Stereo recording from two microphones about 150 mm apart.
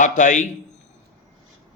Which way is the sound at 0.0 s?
60° left (ahead or behind).